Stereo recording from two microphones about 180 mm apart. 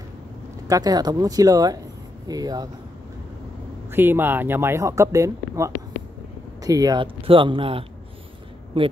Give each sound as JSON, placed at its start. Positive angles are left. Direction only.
{"t": 0.7, "sound": "speech", "side_deg": -20}
{"t": 3.9, "sound": "speech", "side_deg": -10}